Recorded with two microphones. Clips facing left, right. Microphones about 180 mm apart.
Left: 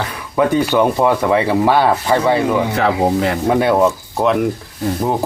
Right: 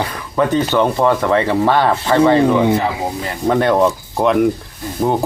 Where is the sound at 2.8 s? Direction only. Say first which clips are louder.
Left 5 dB; 70° left (ahead or behind).